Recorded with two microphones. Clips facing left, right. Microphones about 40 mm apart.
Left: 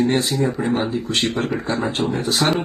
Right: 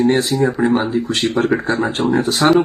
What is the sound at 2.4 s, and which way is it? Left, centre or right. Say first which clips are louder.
Speech: right 7 dB; centre.